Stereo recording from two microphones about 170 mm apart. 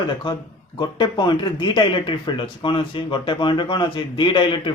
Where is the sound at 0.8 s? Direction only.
25° left (ahead or behind).